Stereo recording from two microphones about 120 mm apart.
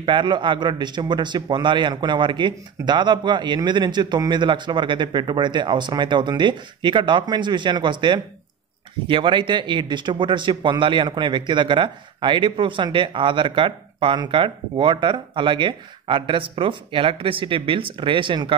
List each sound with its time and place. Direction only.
0.0 s a man's voice: 40° right (ahead or behind)